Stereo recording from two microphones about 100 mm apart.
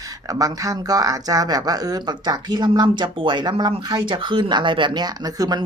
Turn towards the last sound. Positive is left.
turn(degrees=-40)  # may be behind; listen again after turning